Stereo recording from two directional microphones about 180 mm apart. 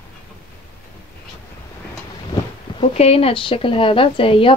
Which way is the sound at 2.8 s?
35° left (ahead or behind).